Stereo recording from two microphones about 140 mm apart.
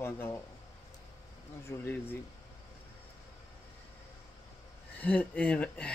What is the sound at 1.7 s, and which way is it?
Speech, 15° left (ahead or behind).